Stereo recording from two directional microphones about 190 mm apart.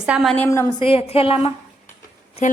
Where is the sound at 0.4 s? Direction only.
15° left (ahead or behind).